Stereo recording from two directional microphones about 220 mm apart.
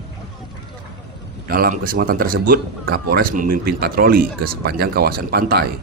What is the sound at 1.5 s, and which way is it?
A man's voice, 40° right (ahead or behind).